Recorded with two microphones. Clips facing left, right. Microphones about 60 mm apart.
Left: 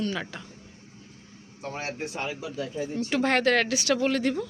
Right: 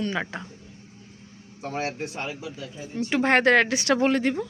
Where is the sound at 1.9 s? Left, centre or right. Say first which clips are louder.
Right 1 dB; centre.